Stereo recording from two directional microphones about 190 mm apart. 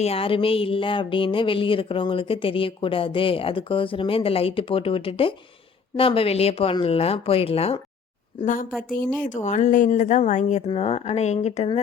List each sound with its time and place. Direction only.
0.0 s a woman's voice: 30° left (ahead or behind)
9.2 s a woman's voice: 40° left (ahead or behind)